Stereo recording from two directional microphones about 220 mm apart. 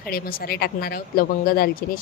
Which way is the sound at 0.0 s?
40° left (ahead or behind).